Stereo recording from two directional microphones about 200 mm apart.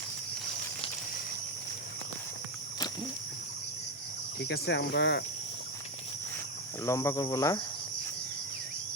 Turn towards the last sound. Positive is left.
turn(degrees=15)  # may be behind; listen again after turning